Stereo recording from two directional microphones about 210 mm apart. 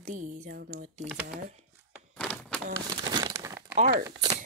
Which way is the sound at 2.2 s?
5° left (ahead or behind).